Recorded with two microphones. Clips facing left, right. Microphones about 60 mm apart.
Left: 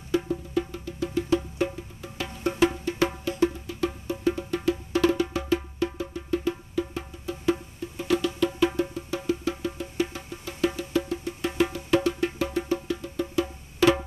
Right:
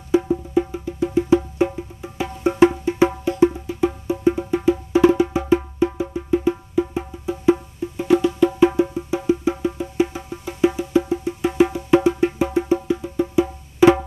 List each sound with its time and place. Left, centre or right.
0.1 s music: centre